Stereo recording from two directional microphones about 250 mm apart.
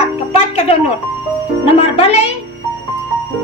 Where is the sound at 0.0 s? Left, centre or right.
Left.